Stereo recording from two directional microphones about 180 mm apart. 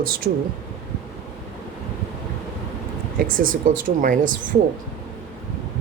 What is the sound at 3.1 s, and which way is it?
Speech, 50° right (ahead or behind).